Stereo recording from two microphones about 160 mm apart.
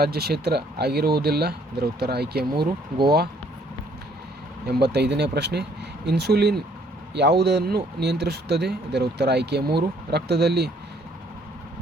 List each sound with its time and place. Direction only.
0.0 s speech: 80° right
4.6 s speech: 90° right